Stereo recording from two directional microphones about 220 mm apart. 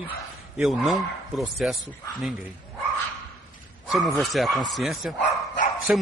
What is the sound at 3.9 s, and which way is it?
Speech, centre (ahead or behind).